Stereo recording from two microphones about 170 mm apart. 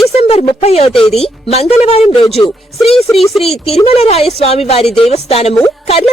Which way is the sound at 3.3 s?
Centre (ahead or behind).